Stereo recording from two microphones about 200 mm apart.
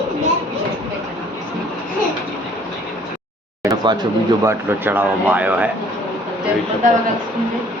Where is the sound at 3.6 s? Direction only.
15° right (ahead or behind).